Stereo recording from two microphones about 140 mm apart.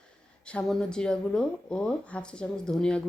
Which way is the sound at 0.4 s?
5° left (ahead or behind).